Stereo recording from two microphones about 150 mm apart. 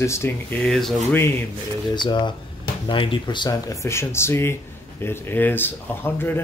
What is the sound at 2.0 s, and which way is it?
Speech, 30° left (ahead or behind).